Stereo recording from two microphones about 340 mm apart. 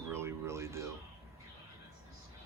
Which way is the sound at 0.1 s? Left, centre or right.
Centre.